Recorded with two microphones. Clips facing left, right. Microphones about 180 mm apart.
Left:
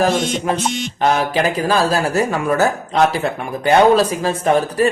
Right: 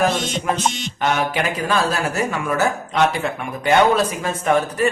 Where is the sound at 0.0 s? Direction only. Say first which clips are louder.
Left 3 dB; 30° left (ahead or behind).